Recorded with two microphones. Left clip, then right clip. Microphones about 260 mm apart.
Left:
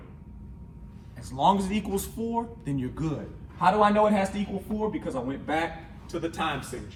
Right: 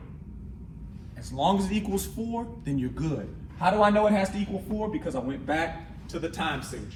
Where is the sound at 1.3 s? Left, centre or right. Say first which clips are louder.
Left 2 dB; centre.